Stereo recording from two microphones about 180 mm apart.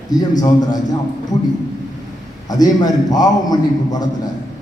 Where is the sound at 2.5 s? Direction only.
20° left (ahead or behind).